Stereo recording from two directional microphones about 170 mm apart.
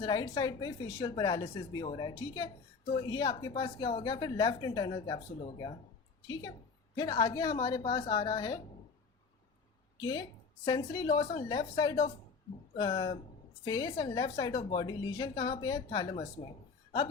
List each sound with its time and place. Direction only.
0.0 s a woman's voice: 25° left (ahead or behind)
6.9 s a woman's voice: 25° left (ahead or behind)
10.0 s a woman's voice: 20° left (ahead or behind)